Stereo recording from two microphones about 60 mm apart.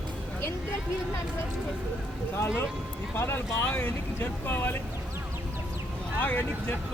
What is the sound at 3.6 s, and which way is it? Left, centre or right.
Speech, left.